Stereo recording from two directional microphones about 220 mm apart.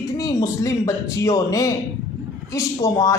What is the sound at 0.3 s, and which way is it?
A man's voice, 15° left (ahead or behind).